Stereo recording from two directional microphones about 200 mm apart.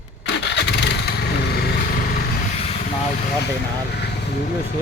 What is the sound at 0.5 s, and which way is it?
Motorcycle, 60° left (ahead or behind).